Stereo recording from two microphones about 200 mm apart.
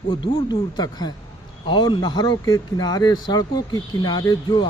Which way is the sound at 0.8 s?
20° left (ahead or behind).